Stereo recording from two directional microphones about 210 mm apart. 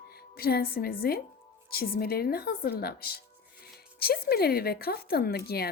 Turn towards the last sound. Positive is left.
turn(degrees=50)  # may be behind; listen again after turning